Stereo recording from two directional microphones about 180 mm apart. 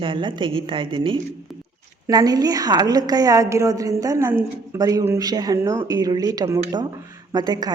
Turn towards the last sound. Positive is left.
turn(degrees=-20)  # may be behind; listen again after turning